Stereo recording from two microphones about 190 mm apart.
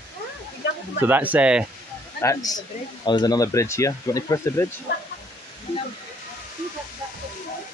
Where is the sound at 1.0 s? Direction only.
10° right (ahead or behind).